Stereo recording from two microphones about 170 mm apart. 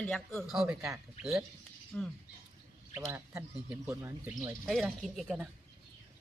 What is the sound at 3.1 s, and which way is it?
Speech, 10° right (ahead or behind).